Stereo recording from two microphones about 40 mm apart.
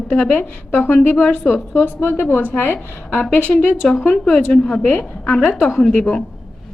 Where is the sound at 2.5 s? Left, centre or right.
Left.